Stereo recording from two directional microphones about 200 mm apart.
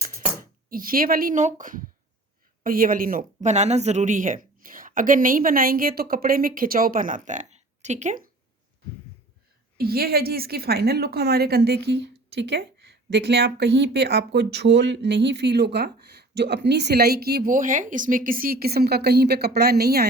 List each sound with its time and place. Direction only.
0.3 s a woman's voice: 45° right (ahead or behind)
9.7 s a woman's voice: 50° right (ahead or behind)